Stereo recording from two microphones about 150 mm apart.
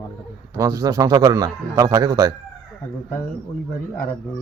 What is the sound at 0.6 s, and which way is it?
A man's voice, 25° right (ahead or behind).